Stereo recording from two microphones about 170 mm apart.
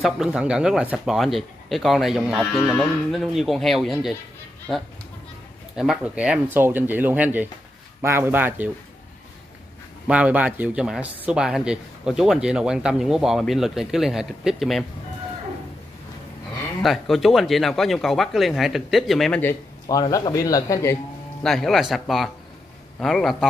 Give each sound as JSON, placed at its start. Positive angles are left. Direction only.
{"t": 0.0, "sound": "speech", "side_deg": -5}
{"t": 5.8, "sound": "speech", "side_deg": -5}
{"t": 10.0, "sound": "speech", "side_deg": -10}
{"t": 16.8, "sound": "speech", "side_deg": 0}
{"t": 19.4, "sound": "a man's voice", "side_deg": 20}
{"t": 21.4, "sound": "a man's voice", "side_deg": 0}